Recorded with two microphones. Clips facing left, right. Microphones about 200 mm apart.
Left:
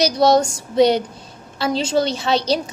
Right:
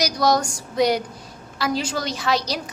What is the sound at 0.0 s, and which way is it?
A woman's voice, 25° left (ahead or behind).